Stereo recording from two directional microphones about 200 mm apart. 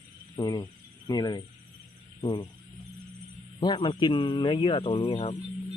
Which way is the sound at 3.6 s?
25° left (ahead or behind).